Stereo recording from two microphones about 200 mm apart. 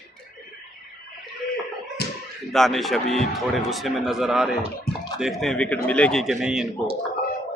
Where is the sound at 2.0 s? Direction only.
55° left (ahead or behind).